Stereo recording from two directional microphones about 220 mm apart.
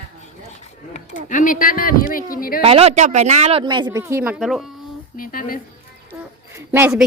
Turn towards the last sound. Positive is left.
turn(degrees=-10)  # may be behind; listen again after turning